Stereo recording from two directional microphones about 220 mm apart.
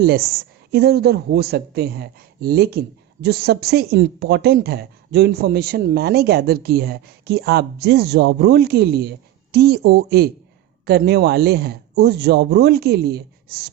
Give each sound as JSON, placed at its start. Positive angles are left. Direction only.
{"t": 0.0, "sound": "speech", "side_deg": -45}